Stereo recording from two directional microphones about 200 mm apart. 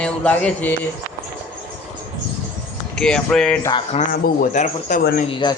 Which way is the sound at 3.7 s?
25° left (ahead or behind).